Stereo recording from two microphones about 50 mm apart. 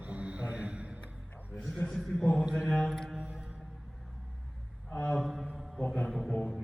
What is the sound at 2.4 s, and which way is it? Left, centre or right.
Mantra, centre.